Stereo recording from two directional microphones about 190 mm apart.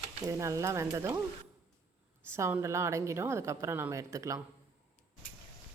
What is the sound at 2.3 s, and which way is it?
A woman's voice, 15° right (ahead or behind).